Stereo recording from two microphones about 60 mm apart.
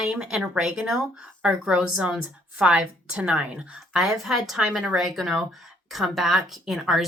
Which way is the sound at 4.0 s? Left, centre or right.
Centre.